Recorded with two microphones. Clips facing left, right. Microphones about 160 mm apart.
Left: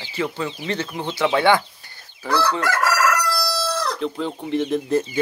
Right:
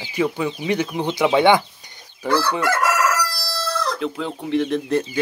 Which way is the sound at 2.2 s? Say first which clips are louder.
Right 1 dB; 20° right (ahead or behind).